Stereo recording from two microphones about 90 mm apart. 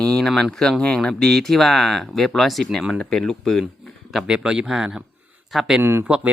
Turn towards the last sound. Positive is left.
turn(degrees=-10)  # may be behind; listen again after turning